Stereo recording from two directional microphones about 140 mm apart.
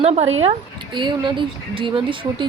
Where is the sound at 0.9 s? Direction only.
35° right (ahead or behind).